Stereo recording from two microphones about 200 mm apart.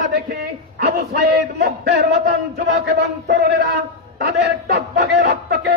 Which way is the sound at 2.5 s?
55° right (ahead or behind).